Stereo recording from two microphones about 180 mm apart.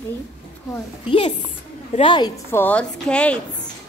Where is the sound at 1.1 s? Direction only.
30° left (ahead or behind).